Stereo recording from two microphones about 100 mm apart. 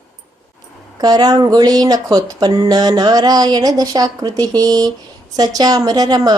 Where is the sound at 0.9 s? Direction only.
40° right (ahead or behind).